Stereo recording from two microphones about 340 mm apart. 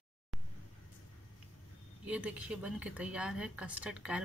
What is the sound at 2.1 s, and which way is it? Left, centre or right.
Speech, centre.